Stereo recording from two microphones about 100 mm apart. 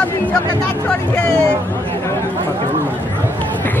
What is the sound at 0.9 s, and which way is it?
Speech, 10° left (ahead or behind).